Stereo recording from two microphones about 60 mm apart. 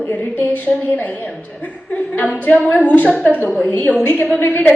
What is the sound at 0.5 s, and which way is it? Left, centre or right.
A woman's voice, left.